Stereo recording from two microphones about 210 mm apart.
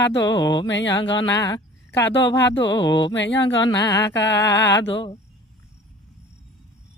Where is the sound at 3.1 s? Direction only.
60° left (ahead or behind).